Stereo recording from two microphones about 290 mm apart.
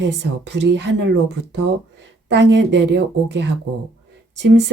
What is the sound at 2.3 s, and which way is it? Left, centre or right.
Speech, right.